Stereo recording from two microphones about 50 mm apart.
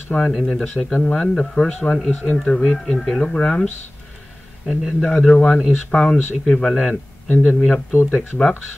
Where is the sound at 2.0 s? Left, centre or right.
Left.